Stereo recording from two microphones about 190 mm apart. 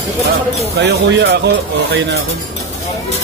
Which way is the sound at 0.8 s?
65° right (ahead or behind).